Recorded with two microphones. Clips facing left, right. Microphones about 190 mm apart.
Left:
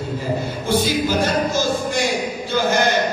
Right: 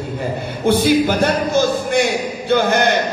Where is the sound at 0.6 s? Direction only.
60° right (ahead or behind).